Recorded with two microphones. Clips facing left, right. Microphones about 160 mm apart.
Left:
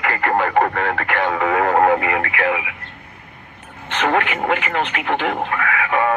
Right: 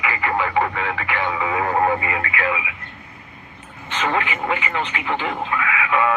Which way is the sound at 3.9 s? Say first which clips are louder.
Left 4 dB; 65° left (ahead or behind).